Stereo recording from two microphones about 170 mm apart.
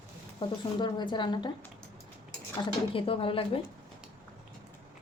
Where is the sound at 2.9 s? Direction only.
30° left (ahead or behind).